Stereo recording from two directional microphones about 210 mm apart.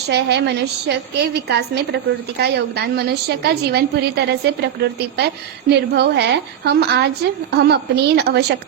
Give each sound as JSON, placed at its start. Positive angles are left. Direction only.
{"t": 0.1, "sound": "a woman's voice", "side_deg": -50}